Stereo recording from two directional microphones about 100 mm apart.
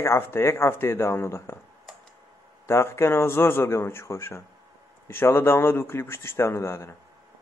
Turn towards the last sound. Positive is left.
turn(degrees=30)  # may be behind; listen again after turning